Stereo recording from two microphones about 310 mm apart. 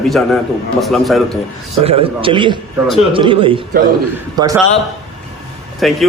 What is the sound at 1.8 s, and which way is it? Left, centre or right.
A man's voice, centre.